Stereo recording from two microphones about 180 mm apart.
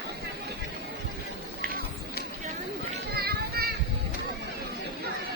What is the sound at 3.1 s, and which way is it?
Children playing, 60° right (ahead or behind).